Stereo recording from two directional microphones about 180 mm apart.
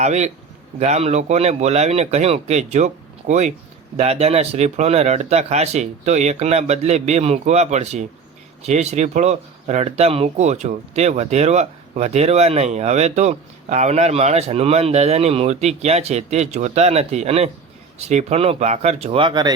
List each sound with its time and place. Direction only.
0.0 s speech: 40° right (ahead or behind); by 19.5 s 25° right (ahead or behind)